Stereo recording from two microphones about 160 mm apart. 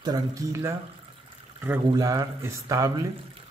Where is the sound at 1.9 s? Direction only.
20° right (ahead or behind).